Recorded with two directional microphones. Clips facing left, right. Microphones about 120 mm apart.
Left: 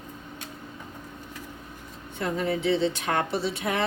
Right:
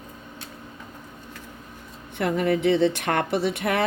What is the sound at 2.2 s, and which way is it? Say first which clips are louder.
Speech: right 5 dB; 60° right (ahead or behind).